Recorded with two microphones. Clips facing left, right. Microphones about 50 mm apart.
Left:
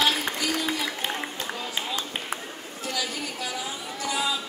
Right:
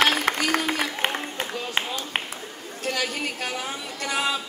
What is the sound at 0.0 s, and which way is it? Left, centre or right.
Music, right.